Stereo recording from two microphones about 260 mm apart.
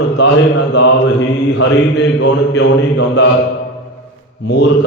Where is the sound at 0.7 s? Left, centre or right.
Left.